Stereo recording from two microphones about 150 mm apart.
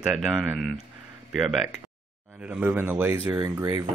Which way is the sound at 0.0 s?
Centre (ahead or behind).